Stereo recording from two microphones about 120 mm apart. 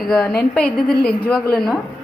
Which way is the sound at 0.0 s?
5° left (ahead or behind).